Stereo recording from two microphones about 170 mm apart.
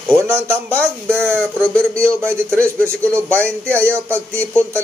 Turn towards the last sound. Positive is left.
turn(degrees=-15)  # may be behind; listen again after turning